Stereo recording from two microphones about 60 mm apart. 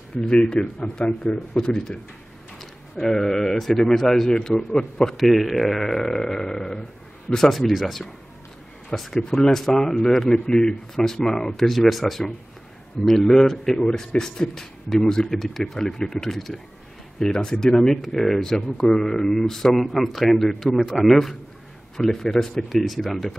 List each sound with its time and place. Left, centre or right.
0.3 s a man's voice: centre
5.1 s a man's voice: centre